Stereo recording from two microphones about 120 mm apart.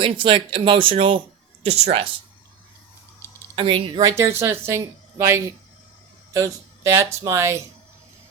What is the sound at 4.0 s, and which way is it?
Speech, 30° right (ahead or behind).